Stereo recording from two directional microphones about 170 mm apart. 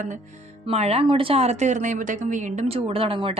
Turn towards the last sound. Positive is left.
turn(degrees=-35)  # may be behind; listen again after turning